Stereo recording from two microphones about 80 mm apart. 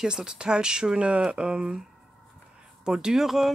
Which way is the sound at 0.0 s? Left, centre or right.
Centre.